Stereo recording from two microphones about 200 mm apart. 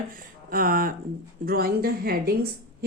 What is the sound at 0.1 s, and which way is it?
A woman's voice, 45° right (ahead or behind).